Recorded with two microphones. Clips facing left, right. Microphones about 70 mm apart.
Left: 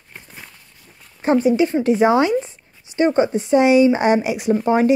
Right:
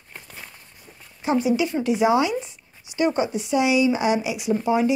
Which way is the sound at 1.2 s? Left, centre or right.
Left.